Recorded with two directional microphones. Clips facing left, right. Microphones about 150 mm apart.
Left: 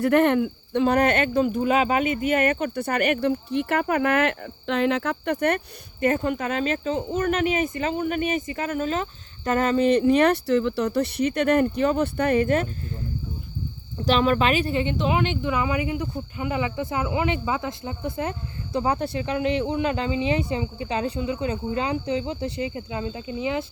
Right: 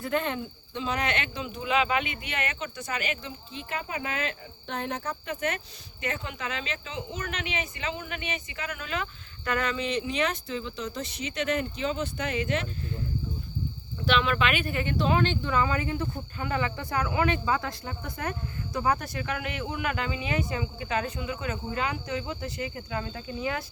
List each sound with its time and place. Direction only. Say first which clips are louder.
0.0 s speech: left 11 dB; 70° left (ahead or behind); by 12.6 s 50° left (ahead or behind)
14.0 s speech: left 5 dB; 40° left (ahead or behind); by 23.6 s 20° left (ahead or behind)